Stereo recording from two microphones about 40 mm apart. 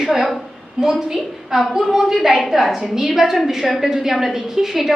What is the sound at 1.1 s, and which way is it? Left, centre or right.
A woman's voice, centre.